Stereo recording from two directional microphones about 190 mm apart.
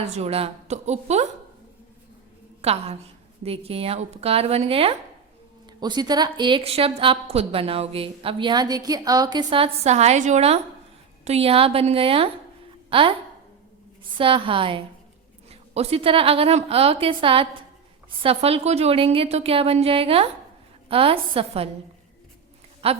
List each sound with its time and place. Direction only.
0.2 s a woman's voice: 30° right (ahead or behind)
2.6 s a woman's voice: 30° right (ahead or behind)
14.2 s a woman's voice: 25° right (ahead or behind)
22.8 s a woman's voice: 30° right (ahead or behind)